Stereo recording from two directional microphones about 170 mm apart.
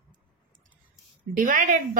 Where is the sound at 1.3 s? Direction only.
50° right (ahead or behind).